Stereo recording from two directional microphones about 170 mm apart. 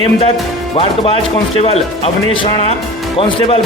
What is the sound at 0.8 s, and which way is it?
Speech, 35° left (ahead or behind).